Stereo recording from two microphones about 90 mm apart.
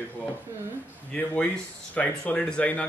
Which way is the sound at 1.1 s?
15° left (ahead or behind).